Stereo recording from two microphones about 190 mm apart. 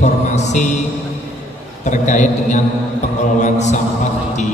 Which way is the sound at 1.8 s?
40° left (ahead or behind).